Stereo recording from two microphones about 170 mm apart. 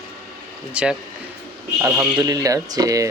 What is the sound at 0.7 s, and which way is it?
Speech, 5° right (ahead or behind).